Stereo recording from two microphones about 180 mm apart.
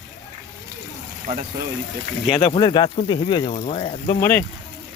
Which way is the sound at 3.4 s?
45° left (ahead or behind).